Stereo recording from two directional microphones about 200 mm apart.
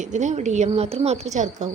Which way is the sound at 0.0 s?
35° right (ahead or behind).